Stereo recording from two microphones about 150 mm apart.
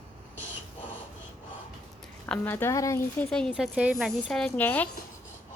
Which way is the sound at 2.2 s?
15° left (ahead or behind).